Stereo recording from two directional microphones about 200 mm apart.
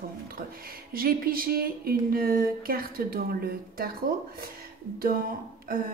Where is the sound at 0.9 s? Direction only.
45° right (ahead or behind).